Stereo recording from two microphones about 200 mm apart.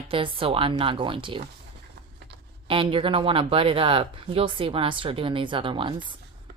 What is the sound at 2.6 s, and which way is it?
A woman's voice, 25° right (ahead or behind).